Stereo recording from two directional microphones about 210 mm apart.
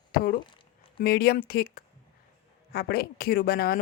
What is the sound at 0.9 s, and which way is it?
Speech, 50° left (ahead or behind).